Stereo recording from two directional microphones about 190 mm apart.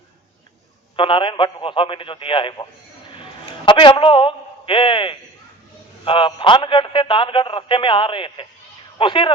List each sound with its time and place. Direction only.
0.9 s a man's voice: 25° left (ahead or behind)
3.7 s a man's voice: 25° left (ahead or behind)